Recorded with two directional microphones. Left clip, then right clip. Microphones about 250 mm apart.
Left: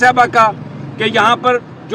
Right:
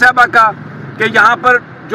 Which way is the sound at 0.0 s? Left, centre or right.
Centre.